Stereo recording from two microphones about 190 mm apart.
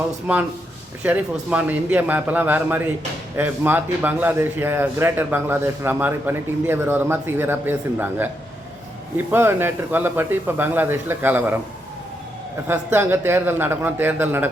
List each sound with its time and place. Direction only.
1.0 s a man's voice: 10° right (ahead or behind)
12.6 s a man's voice: 10° right (ahead or behind)